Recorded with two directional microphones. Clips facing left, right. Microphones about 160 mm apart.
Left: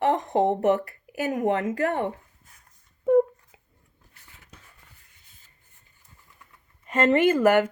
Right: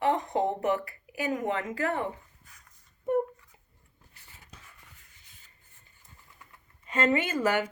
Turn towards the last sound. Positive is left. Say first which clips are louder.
# left 9 dB
turn(degrees=60)  # may be behind; listen again after turning